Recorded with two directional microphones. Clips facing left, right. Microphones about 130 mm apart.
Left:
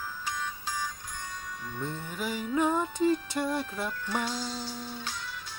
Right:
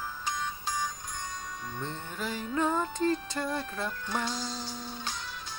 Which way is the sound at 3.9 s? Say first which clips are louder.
Left 1 dB; 20° right (ahead or behind).